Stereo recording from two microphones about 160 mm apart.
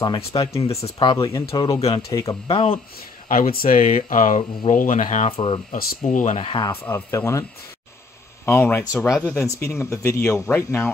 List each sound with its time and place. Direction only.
0.0 s speech: 25° left (ahead or behind)
0.7 s speech: 40° left (ahead or behind); by 2.3 s 20° left (ahead or behind)
2.4 s speech: 35° left (ahead or behind)
3.3 s speech: 55° left (ahead or behind)
5.3 s speech: 35° left (ahead or behind)
5.7 s speech: 55° left (ahead or behind)
6.3 s speech: 30° left (ahead or behind)
6.7 s speech: 15° left (ahead or behind)
8.5 s speech: 15° left (ahead or behind)